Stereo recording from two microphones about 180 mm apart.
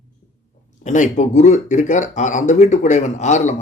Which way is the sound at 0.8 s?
40° left (ahead or behind).